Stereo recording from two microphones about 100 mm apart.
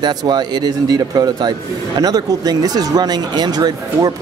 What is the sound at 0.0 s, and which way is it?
Speech, 45° right (ahead or behind).